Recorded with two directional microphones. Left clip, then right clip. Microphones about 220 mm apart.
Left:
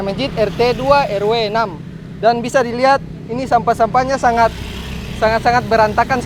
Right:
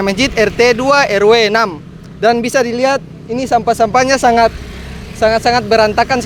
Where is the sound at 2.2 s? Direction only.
35° right (ahead or behind).